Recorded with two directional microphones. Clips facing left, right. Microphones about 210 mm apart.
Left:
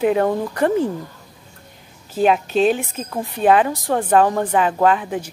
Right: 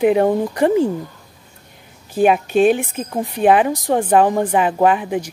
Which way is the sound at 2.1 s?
10° right (ahead or behind).